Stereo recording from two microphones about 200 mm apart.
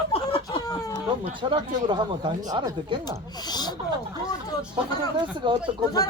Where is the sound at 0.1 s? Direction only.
30° left (ahead or behind).